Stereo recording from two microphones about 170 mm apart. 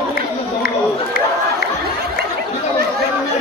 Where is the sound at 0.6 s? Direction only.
60° left (ahead or behind).